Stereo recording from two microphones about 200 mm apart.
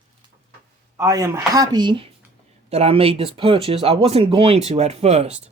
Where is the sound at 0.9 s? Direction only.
15° right (ahead or behind).